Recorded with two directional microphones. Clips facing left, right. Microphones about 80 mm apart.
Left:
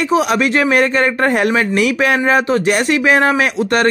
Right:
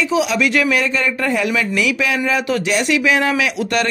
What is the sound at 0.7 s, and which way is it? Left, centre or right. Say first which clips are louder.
Speech: left 5 dB; left.